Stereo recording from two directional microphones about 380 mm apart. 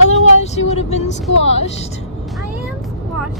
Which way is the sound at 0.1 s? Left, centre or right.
Centre.